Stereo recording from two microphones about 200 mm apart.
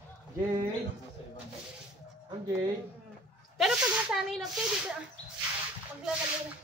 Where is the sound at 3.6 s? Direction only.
Centre (ahead or behind).